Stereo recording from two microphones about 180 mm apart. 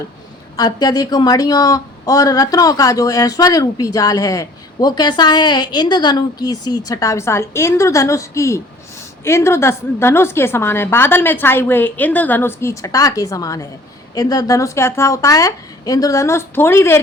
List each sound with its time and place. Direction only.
0.5 s a woman's voice: 20° left (ahead or behind)